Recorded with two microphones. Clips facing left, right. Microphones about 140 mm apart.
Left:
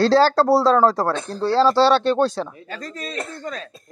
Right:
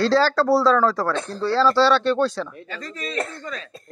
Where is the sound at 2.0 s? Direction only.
50° left (ahead or behind).